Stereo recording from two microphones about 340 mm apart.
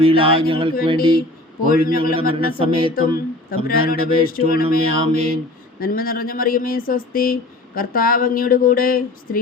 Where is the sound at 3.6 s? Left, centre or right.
Left.